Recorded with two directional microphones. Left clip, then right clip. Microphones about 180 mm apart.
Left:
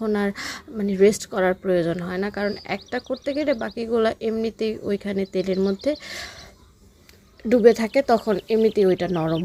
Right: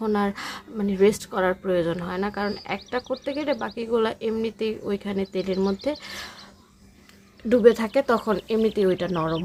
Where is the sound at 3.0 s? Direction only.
Centre (ahead or behind).